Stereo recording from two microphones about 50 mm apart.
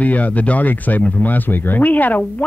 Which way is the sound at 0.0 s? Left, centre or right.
Left.